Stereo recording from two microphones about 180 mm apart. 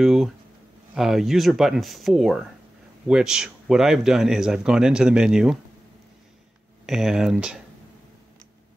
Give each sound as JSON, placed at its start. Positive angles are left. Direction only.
{"t": 0.0, "sound": "speech", "side_deg": 0}
{"t": 6.9, "sound": "speech", "side_deg": 0}